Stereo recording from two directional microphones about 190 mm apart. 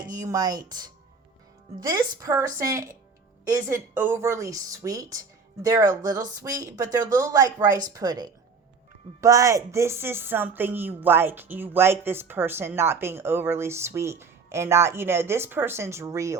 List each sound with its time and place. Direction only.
0.2 s a woman's voice: 20° right (ahead or behind)